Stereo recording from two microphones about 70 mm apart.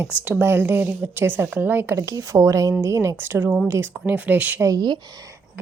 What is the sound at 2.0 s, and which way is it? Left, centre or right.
A woman's voice, right.